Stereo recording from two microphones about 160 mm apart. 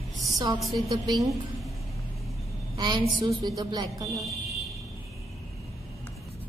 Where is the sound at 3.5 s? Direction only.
25° right (ahead or behind).